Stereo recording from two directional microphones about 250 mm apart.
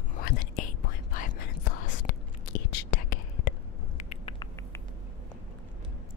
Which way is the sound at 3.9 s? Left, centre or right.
Left.